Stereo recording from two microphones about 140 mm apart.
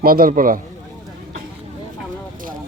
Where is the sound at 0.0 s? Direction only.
90° right.